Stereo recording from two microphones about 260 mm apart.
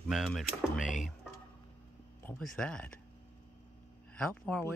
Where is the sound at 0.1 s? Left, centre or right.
Centre.